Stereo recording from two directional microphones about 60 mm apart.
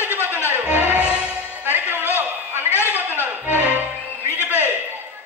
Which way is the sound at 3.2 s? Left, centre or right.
Right.